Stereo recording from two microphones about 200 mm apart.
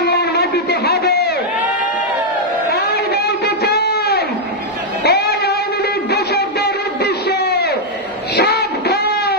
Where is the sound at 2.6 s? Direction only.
55° left (ahead or behind).